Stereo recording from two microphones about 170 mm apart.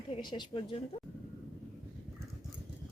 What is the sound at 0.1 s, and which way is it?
Speech, 25° left (ahead or behind).